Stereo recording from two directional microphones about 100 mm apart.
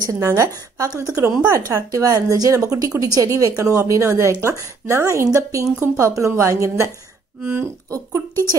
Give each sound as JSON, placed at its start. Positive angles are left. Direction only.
{"t": 0.1, "sound": "speech", "side_deg": -35}
{"t": 7.9, "sound": "speech", "side_deg": -35}